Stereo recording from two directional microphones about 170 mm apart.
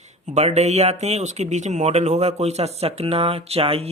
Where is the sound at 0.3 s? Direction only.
40° right (ahead or behind).